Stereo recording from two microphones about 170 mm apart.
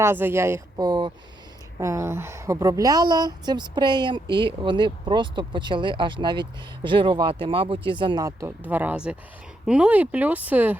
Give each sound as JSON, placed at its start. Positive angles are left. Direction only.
{"t": 0.0, "sound": "a woman's voice", "side_deg": -15}